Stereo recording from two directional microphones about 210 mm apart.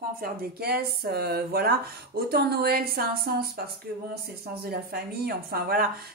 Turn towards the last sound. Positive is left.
turn(degrees=-45)  # may be behind; listen again after turning